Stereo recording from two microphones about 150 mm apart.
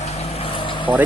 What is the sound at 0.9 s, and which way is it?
Speech, 10° right (ahead or behind).